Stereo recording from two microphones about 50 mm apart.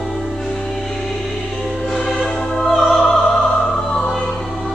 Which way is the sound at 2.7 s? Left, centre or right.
Centre.